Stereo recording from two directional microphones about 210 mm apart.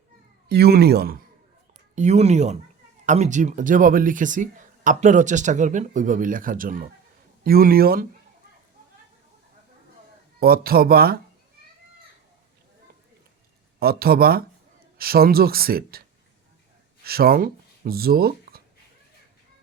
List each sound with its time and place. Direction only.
0.4 s speech: 50° right (ahead or behind)
2.0 s speech: 30° right (ahead or behind)
10.4 s speech: 45° right (ahead or behind)
13.7 s speech: 45° right (ahead or behind)